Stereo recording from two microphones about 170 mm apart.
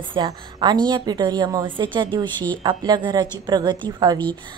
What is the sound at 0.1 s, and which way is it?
A woman's voice, 25° right (ahead or behind).